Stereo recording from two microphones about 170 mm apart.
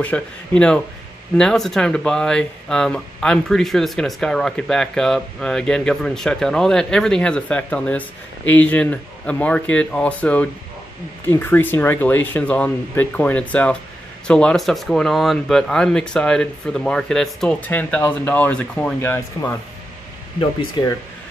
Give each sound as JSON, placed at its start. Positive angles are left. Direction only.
{"t": 0.0, "sound": "speech", "side_deg": 5}
{"t": 20.3, "sound": "speech", "side_deg": 25}